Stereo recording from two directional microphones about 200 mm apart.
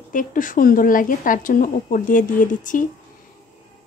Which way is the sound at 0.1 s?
40° left (ahead or behind).